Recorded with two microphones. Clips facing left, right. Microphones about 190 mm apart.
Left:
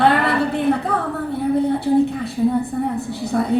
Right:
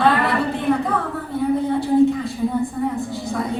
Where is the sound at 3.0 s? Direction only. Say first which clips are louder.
Left 3 dB; 65° left (ahead or behind).